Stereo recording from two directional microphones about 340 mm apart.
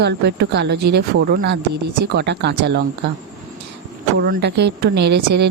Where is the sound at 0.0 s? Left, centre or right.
Right.